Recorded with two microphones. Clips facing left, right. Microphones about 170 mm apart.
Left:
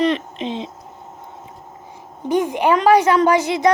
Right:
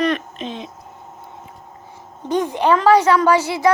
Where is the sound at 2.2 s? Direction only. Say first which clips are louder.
Left 1 dB; 10° left (ahead or behind).